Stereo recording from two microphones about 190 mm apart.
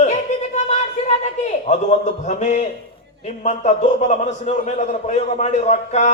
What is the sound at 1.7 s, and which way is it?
A man's voice, 35° left (ahead or behind).